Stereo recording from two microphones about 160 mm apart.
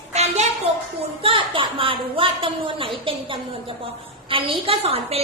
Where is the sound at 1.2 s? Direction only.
35° right (ahead or behind).